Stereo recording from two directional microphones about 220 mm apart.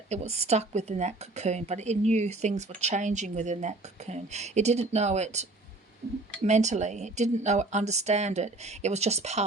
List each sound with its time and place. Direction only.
0.1 s speech: 30° right (ahead or behind)